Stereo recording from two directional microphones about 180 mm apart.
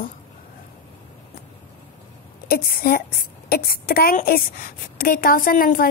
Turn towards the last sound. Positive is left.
turn(degrees=55)  # may be behind; listen again after turning